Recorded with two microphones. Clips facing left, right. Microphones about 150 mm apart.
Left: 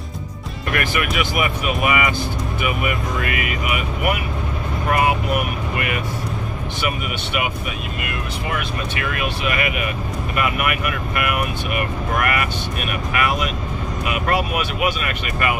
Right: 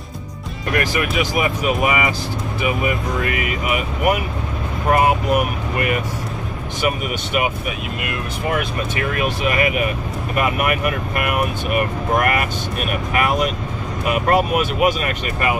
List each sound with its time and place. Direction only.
0.7 s speech: 35° right (ahead or behind)
9.1 s speech: 35° right (ahead or behind)